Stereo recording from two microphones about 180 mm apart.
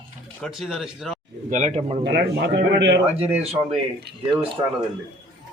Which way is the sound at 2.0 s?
75° right (ahead or behind).